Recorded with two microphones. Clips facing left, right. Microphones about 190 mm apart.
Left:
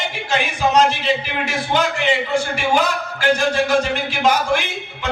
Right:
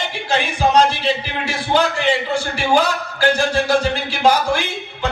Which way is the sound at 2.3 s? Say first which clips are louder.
Right 1 dB; 35° right (ahead or behind).